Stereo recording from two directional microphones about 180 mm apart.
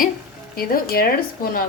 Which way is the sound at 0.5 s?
55° left (ahead or behind).